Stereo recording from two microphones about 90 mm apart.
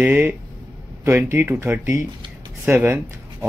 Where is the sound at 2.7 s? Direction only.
25° right (ahead or behind).